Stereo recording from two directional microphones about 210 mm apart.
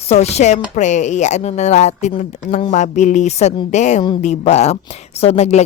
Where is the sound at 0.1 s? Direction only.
30° left (ahead or behind).